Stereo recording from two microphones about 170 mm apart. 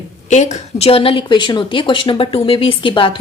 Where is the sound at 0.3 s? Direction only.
45° left (ahead or behind).